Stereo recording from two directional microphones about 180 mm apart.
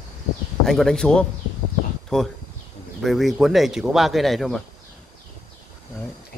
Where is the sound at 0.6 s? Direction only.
Centre (ahead or behind).